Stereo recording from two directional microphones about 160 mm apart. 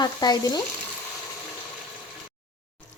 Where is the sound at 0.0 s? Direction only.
25° left (ahead or behind).